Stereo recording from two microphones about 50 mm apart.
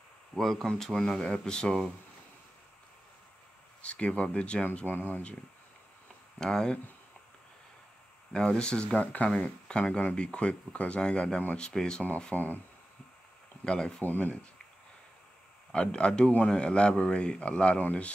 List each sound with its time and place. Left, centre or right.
0.4 s speech: centre
3.8 s speech: left
4.8 s speech: left
6.3 s speech: centre
8.3 s speech: centre; by 9.2 s left
9.7 s speech: centre
12.3 s speech: left
13.7 s speech: centre
14.0 s speech: left
15.7 s speech: centre